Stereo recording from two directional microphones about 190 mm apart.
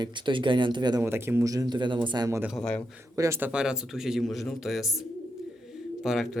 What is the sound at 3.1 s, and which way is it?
A man's voice, 15° right (ahead or behind).